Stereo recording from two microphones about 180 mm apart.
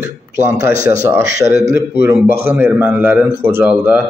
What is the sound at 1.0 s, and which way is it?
A man's voice, 15° right (ahead or behind).